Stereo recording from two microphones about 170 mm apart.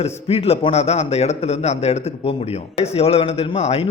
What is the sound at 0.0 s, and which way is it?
A man's voice, 35° left (ahead or behind).